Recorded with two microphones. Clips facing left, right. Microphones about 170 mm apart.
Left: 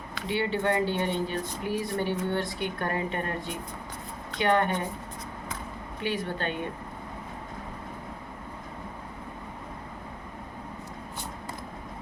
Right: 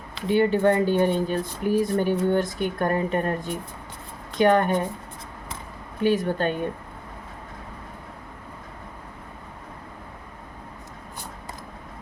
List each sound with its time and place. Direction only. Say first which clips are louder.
0.3 s speech: right 8 dB; 45° right (ahead or behind)
4.4 s speech: right 6 dB; 45° right (ahead or behind)
6.0 s speech: right 9 dB; 45° right (ahead or behind)